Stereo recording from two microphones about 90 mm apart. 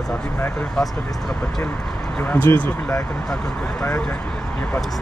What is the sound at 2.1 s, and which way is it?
Speech, 20° left (ahead or behind).